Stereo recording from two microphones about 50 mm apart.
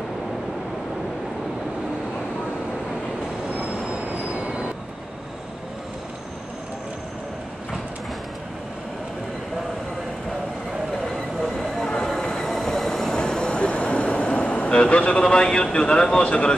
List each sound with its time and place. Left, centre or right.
4.4 s train: right
11.4 s train: centre; by 16.5 s left